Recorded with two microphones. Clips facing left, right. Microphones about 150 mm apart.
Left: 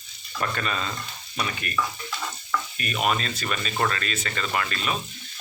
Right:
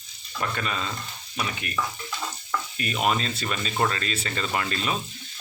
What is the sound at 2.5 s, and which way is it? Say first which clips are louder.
Speech: even; 20° right (ahead or behind).